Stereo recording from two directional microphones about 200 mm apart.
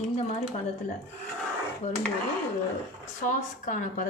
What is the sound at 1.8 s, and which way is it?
Speech, 35° left (ahead or behind).